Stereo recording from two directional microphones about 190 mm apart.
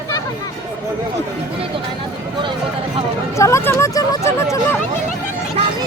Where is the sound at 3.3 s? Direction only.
15° left (ahead or behind).